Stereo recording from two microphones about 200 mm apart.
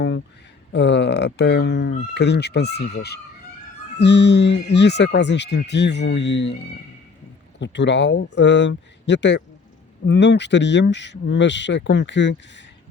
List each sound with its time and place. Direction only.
0.7 s speech: 60° left (ahead or behind)
7.6 s speech: 60° left (ahead or behind)